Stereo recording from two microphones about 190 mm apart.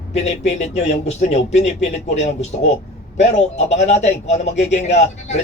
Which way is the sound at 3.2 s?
35° left (ahead or behind).